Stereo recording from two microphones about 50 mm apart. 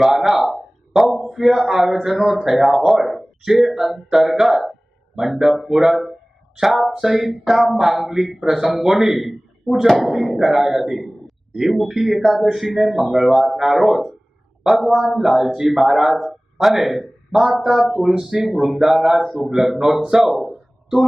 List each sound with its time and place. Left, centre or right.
0.2 s a man's voice: centre